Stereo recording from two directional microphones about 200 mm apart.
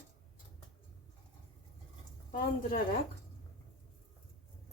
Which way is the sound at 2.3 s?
45° left (ahead or behind).